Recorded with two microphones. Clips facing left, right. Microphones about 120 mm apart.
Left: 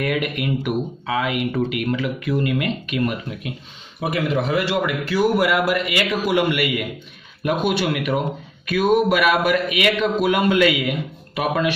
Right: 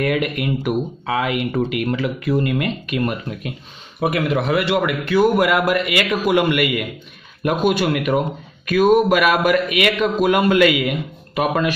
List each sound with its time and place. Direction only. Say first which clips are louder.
0.0 s speech: right 3 dB; 40° right (ahead or behind)
4.0 s a man's voice: right 2 dB; 60° right (ahead or behind)
7.4 s a man's voice: right 3 dB; 45° right (ahead or behind)